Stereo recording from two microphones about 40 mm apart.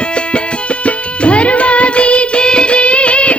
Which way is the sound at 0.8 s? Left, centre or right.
Left.